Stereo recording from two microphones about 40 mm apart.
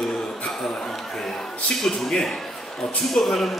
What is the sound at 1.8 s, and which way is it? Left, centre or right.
A man's voice, centre.